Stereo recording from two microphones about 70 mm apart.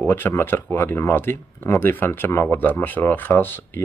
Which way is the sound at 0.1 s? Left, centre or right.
Left.